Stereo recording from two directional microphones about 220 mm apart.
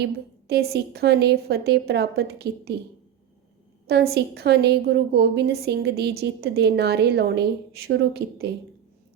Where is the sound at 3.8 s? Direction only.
45° right (ahead or behind).